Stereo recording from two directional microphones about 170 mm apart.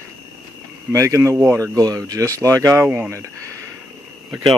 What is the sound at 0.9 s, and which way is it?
Speech, 20° right (ahead or behind).